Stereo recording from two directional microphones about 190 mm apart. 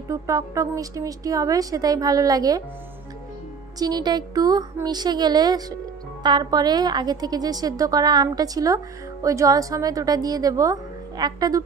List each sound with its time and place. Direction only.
0.1 s a woman's voice: 15° right (ahead or behind)
3.8 s a woman's voice: 20° right (ahead or behind)